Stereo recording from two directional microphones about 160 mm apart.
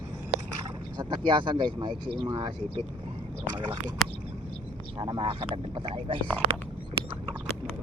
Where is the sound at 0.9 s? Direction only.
30° right (ahead or behind).